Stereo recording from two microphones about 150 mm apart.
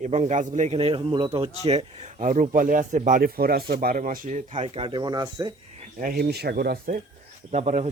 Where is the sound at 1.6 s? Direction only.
45° right (ahead or behind).